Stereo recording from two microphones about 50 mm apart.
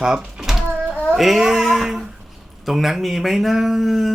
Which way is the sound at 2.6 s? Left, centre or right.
Centre.